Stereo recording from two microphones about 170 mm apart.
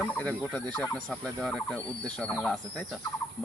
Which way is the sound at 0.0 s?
10° left (ahead or behind).